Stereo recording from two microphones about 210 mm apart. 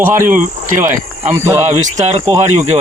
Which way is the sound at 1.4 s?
10° right (ahead or behind).